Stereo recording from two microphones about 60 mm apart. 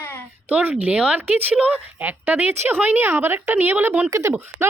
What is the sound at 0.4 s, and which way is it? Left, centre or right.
Speech, right.